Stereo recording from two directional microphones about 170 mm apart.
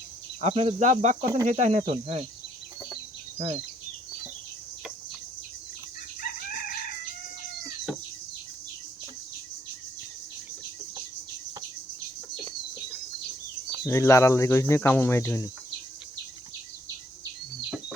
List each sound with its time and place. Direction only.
0.4 s cricket: 40° right (ahead or behind)
1.2 s speech: 20° right (ahead or behind)
1.5 s speech: 45° right (ahead or behind)
1.9 s cricket: 35° right (ahead or behind)
2.9 s chicken: 35° right (ahead or behind)
6.2 s chicken: 60° left (ahead or behind)
13.8 s speech: 15° left (ahead or behind)